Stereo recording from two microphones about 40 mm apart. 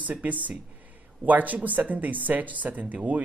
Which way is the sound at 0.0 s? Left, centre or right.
Right.